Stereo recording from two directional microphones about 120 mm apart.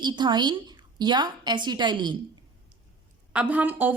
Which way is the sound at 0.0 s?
40° right (ahead or behind).